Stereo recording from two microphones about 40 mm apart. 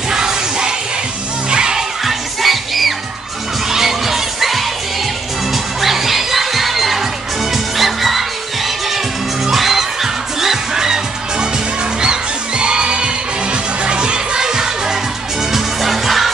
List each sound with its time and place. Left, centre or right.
0.1 s music: centre
2.0 s music: centre
9.5 s music: centre
15.5 s music: centre